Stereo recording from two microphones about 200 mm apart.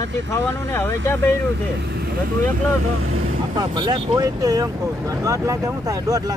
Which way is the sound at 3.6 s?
20° right (ahead or behind).